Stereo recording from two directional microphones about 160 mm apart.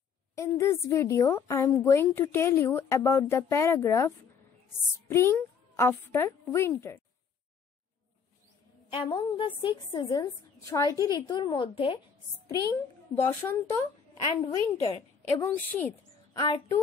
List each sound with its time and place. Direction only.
0.4 s a woman's voice: 20° left (ahead or behind)
8.9 s a woman's voice: 30° left (ahead or behind)
13.4 s a woman's voice: 15° left (ahead or behind)
16.3 s a woman's voice: 25° left (ahead or behind)